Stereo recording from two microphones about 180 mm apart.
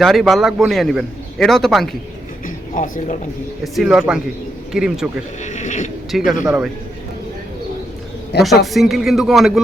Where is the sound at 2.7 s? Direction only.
50° left (ahead or behind).